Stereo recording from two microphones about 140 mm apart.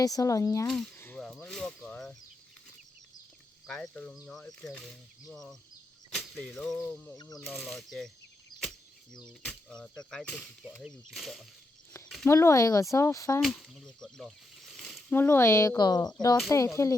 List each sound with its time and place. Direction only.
0.0 s speech: 25° left (ahead or behind)
0.9 s a sound: 15° left (ahead or behind)
1.2 s a sound: 5° left (ahead or behind)
3.7 s speech: 5° left (ahead or behind)
7.2 s speech: 25° left (ahead or behind)
7.4 s speech: centre (ahead or behind)
9.5 s speech: 5° left (ahead or behind)
12.0 s a sound: 5° left (ahead or behind)
12.3 s speech: 20° left (ahead or behind)
13.4 s speech: centre (ahead or behind)
15.1 s speech: 15° left (ahead or behind)